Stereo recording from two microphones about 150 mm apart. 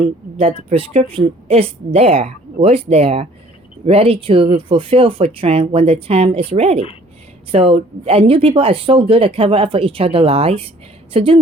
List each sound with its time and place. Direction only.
0.3 s speech: 40° right (ahead or behind)